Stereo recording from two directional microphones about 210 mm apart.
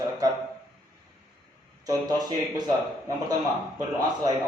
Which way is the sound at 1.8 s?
20° right (ahead or behind).